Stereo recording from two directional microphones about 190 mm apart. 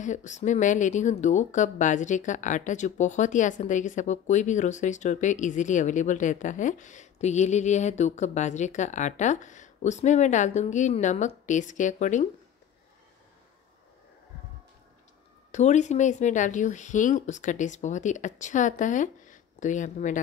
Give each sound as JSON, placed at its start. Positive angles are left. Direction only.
{"t": 0.0, "sound": "speech", "side_deg": 40}
{"t": 15.5, "sound": "speech", "side_deg": 40}